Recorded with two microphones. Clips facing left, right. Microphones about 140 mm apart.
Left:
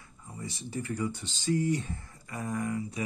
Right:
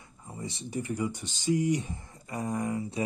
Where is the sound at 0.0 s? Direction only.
25° right (ahead or behind).